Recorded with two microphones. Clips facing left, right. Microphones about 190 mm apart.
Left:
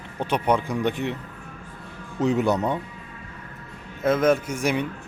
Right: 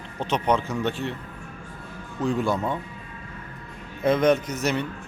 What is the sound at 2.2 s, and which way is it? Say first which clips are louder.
Speech: left 3 dB; 20° left (ahead or behind).